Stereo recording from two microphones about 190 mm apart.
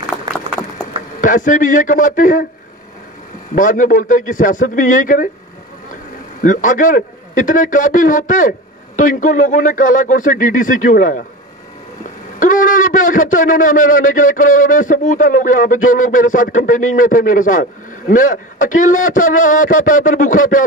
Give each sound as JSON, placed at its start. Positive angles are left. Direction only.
{"t": 1.2, "sound": "a man's voice", "side_deg": 45}
{"t": 3.5, "sound": "a man's voice", "side_deg": 45}
{"t": 6.4, "sound": "a man's voice", "side_deg": 45}
{"t": 12.4, "sound": "a man's voice", "side_deg": 45}